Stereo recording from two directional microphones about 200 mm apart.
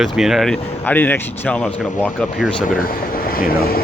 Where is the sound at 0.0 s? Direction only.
Centre (ahead or behind).